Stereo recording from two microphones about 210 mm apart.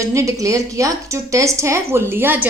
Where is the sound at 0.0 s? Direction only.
15° right (ahead or behind).